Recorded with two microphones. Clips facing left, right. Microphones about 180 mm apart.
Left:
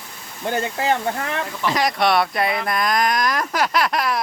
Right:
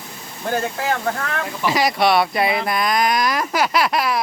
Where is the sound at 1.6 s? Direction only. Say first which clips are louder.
Right 2 dB; 5° right (ahead or behind).